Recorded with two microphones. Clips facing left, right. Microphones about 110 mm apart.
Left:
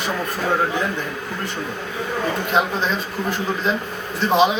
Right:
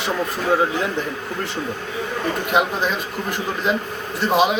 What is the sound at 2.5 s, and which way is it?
Speech, 10° right (ahead or behind).